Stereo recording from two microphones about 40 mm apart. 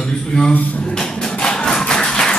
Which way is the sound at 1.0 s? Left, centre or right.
Centre.